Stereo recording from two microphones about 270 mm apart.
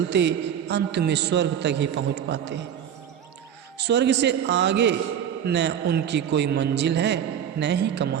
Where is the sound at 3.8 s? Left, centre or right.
Right.